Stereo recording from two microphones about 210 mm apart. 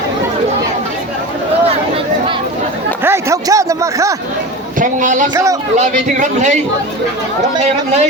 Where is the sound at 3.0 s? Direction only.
15° right (ahead or behind).